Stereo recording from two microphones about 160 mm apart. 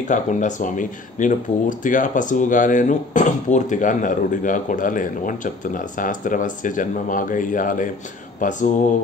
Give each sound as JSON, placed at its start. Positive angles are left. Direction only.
{"t": 0.1, "sound": "speech", "side_deg": 50}